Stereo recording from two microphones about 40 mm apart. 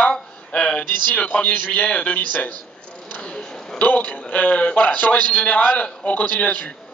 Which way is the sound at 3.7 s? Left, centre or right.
Left.